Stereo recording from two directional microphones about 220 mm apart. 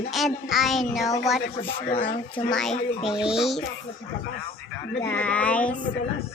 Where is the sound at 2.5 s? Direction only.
Centre (ahead or behind).